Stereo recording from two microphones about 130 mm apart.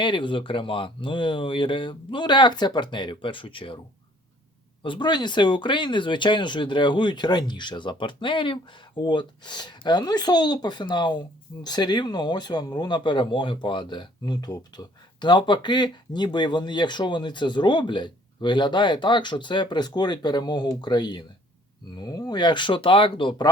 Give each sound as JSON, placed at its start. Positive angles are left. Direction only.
{"t": 0.0, "sound": "speech", "side_deg": 40}
{"t": 4.8, "sound": "speech", "side_deg": 40}